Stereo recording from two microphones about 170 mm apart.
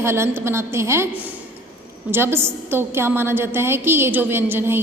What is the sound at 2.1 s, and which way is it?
A woman's voice, 15° right (ahead or behind).